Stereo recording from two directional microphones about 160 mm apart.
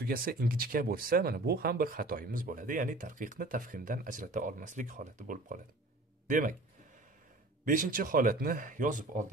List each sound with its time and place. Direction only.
0.0 s speech: 65° right (ahead or behind)
7.6 s speech: 60° right (ahead or behind)